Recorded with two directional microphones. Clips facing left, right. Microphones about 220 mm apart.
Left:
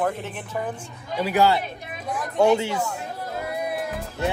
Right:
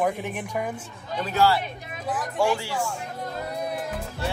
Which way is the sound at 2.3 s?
20° left (ahead or behind).